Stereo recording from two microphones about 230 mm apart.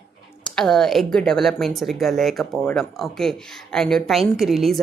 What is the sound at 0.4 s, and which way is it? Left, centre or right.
Speech, centre.